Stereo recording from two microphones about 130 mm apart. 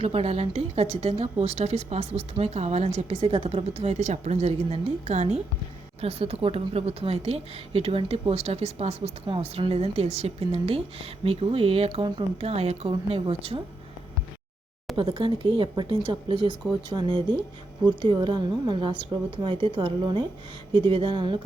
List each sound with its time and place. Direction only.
0.0 s a woman's voice: 50° right (ahead or behind)
14.9 s speech: 40° right (ahead or behind)